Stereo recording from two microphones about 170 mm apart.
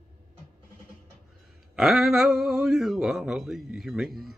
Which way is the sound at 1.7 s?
Centre (ahead or behind).